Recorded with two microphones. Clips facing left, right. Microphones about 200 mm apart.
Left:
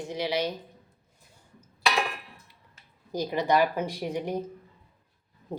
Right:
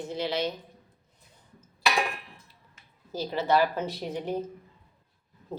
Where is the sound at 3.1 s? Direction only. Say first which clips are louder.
Left 1 dB; 15° left (ahead or behind).